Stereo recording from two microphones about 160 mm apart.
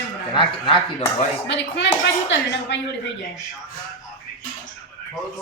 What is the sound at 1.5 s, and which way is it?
A woman's voice, 90° left.